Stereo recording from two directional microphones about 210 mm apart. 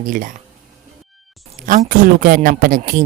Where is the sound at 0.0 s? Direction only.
40° right (ahead or behind).